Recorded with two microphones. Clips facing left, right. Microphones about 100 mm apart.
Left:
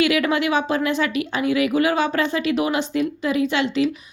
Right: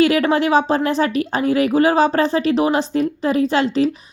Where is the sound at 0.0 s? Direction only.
35° right (ahead or behind).